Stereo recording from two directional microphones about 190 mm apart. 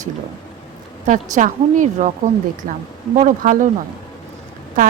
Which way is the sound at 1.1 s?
40° right (ahead or behind).